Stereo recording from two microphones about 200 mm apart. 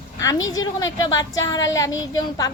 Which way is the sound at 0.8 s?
20° left (ahead or behind).